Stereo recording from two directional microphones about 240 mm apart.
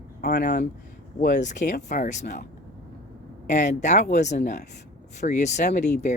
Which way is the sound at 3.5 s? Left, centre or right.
Left.